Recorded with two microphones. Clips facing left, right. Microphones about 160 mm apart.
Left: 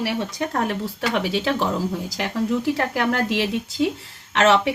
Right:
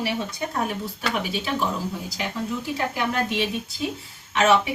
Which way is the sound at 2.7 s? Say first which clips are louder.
Left 3 dB; 80° left.